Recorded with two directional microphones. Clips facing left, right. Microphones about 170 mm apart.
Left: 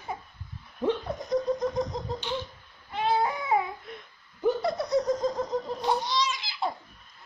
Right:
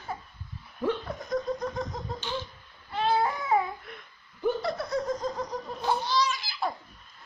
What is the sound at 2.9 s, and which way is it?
Baby cry, 15° left (ahead or behind).